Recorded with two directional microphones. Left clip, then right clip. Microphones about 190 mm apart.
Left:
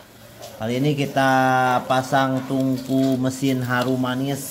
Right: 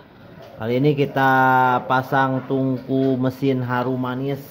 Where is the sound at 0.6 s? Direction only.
15° right (ahead or behind).